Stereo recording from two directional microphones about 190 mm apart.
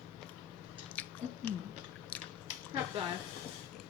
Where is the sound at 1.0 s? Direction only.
10° left (ahead or behind).